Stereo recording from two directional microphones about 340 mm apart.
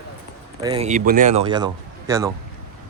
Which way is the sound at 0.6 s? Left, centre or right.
Centre.